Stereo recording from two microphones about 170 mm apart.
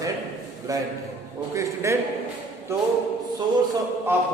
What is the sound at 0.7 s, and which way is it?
A man's voice, 20° right (ahead or behind).